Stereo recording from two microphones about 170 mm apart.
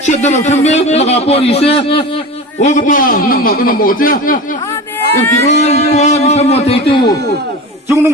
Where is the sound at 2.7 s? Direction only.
50° left (ahead or behind).